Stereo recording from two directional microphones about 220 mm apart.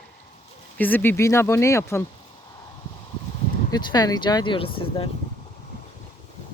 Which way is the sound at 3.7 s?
20° left (ahead or behind).